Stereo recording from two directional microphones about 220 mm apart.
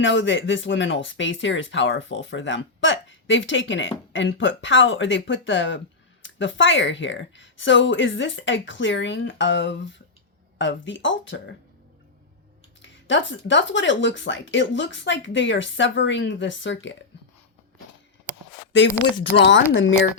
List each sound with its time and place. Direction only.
0.0 s speech: 60° left (ahead or behind)
12.8 s speech: 55° left (ahead or behind)
19.1 s speech: 50° left (ahead or behind)